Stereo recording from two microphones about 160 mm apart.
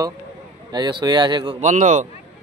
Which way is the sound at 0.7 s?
30° right (ahead or behind).